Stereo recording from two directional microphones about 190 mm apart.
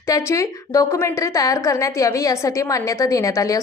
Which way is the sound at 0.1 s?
15° left (ahead or behind).